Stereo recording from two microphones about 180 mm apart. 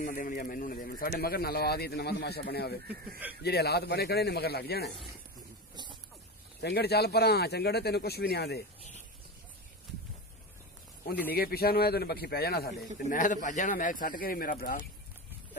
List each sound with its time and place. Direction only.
0.0 s a man's voice: 50° left (ahead or behind)
6.6 s a man's voice: 65° left (ahead or behind)
11.3 s a man's voice: 55° left (ahead or behind)